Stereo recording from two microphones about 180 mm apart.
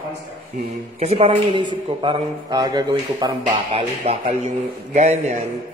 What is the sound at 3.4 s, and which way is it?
A man's voice, 35° right (ahead or behind).